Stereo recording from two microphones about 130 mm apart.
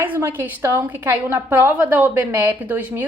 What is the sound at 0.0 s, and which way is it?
A woman's voice, 15° right (ahead or behind).